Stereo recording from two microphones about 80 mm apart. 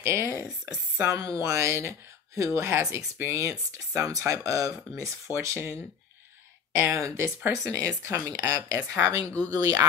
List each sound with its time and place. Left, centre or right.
0.0 s speech: right
5.4 s speech: right
6.8 s speech: right